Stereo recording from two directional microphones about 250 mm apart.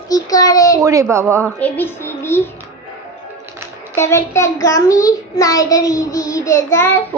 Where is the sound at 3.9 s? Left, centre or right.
Centre.